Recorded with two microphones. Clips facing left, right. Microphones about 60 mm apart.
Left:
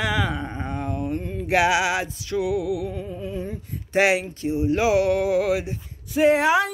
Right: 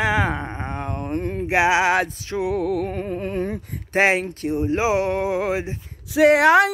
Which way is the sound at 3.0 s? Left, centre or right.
Right.